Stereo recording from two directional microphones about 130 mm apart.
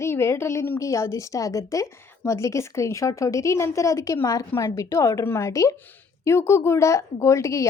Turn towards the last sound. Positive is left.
turn(degrees=25)  # may be behind; listen again after turning